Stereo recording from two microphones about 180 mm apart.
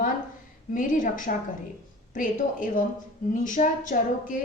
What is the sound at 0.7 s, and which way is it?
A woman's voice, 50° left (ahead or behind).